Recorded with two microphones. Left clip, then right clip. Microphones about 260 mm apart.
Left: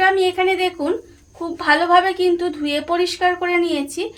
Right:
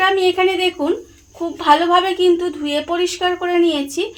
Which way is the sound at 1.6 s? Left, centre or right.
Right.